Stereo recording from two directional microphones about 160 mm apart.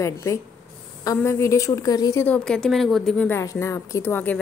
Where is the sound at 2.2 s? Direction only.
5° left (ahead or behind).